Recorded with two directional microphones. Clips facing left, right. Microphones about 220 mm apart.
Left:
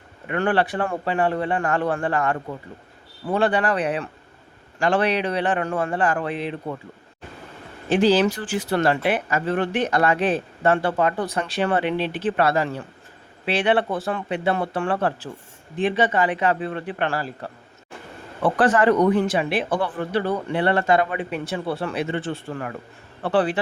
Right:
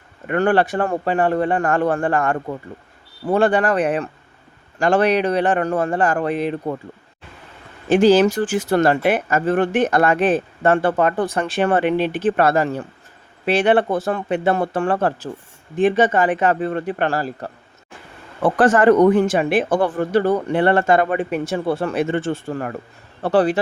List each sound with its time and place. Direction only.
0.3 s speech: 45° right (ahead or behind)
7.9 s a man's voice: 45° right (ahead or behind)